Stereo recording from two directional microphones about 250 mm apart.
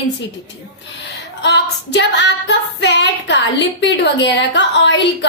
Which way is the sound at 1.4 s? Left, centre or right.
Left.